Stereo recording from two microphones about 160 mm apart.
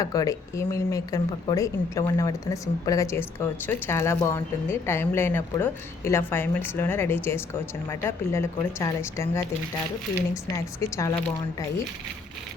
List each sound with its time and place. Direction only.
0.0 s speech: 20° left (ahead or behind)
10.5 s a woman's voice: 20° left (ahead or behind)